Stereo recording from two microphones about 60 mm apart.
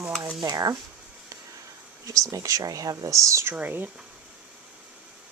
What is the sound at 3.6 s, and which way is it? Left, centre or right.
Speech, right.